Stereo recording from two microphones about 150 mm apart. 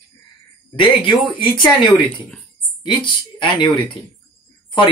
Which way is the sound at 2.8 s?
35° left (ahead or behind).